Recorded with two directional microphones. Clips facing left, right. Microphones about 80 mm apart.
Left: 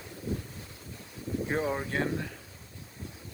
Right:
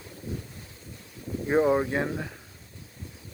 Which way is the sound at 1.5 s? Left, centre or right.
Right.